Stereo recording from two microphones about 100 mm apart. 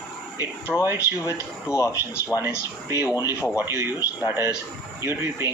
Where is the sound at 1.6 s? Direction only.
30° left (ahead or behind).